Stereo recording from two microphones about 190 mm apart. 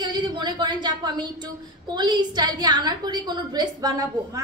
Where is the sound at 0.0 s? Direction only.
25° right (ahead or behind).